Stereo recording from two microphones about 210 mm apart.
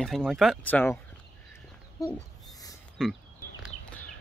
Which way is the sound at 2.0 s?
15° left (ahead or behind).